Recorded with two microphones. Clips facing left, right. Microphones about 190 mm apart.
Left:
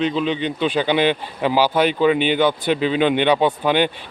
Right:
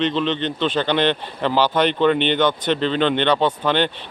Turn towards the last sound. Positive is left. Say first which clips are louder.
# left 2 dB
turn(degrees=10)  # may be behind; listen again after turning